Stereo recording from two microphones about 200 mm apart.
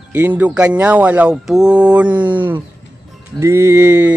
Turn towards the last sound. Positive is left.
turn(degrees=-10)  # may be behind; listen again after turning